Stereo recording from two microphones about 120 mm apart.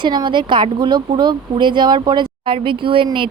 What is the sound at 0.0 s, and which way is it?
Speech, 40° right (ahead or behind).